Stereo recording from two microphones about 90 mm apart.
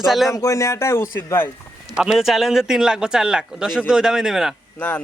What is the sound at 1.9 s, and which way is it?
Speech, 5° right (ahead or behind).